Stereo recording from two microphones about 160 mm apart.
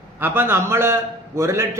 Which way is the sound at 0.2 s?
15° right (ahead or behind).